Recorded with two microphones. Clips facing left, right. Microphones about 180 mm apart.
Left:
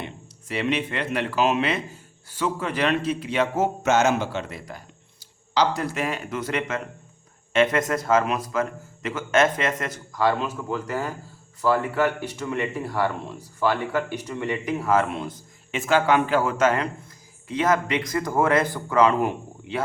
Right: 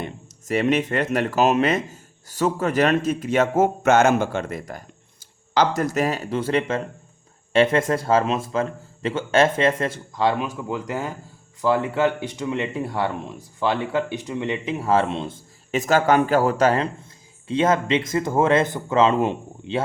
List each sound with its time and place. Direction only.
0.0 s speech: 45° right (ahead or behind); by 15.4 s 25° right (ahead or behind)
15.7 s speech: 40° right (ahead or behind); by 19.8 s 25° right (ahead or behind)